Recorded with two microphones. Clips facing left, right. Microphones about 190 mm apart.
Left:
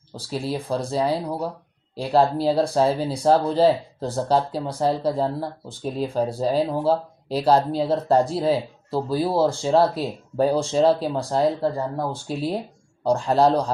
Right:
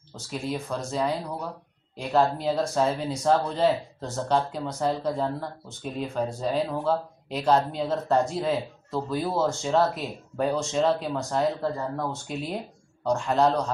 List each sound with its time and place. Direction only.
0.1 s speech: 35° left (ahead or behind)